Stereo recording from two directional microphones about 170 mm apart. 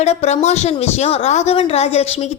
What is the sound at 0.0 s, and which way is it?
A woman's voice, 40° left (ahead or behind).